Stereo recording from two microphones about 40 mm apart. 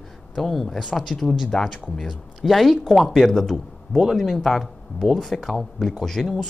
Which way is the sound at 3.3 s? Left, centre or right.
Centre.